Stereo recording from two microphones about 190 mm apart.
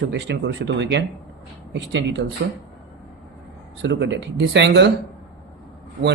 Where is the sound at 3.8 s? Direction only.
70° right (ahead or behind).